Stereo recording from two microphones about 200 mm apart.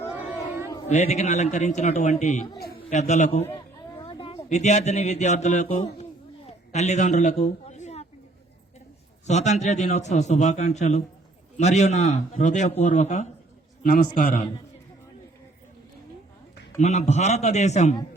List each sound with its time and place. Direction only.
0.9 s a man's voice: 35° left (ahead or behind)
3.5 s a sound: 25° left (ahead or behind)
4.4 s a man's voice: 35° left (ahead or behind)
9.2 s a man's voice: 35° left (ahead or behind)
13.8 s a man's voice: 50° left (ahead or behind)
16.7 s a man's voice: 35° left (ahead or behind)